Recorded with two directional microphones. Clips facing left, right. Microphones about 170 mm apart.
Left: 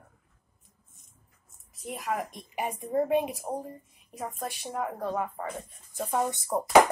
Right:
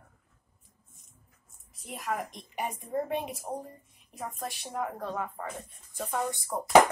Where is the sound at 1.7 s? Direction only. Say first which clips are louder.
Left 2 dB; centre (ahead or behind).